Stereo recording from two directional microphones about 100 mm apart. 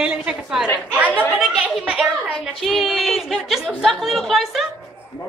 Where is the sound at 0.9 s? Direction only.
15° right (ahead or behind).